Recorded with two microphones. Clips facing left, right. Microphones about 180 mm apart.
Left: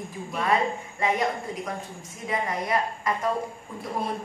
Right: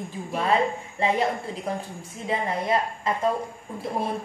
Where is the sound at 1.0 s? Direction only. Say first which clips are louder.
Right 2 dB; 30° right (ahead or behind).